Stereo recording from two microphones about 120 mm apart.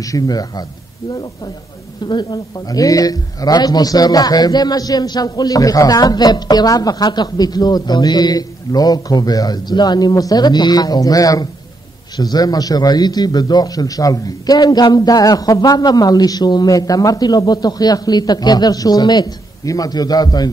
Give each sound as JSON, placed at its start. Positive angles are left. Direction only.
{"t": 0.0, "sound": "a man's voice", "side_deg": 30}
{"t": 2.0, "sound": "a man's voice", "side_deg": 35}